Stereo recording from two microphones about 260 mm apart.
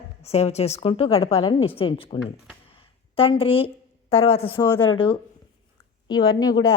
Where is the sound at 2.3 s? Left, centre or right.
Left.